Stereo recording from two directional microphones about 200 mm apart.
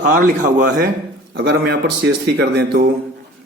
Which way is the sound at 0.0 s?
40° right (ahead or behind).